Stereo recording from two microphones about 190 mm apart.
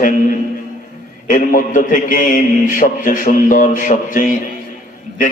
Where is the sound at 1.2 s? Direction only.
45° left (ahead or behind).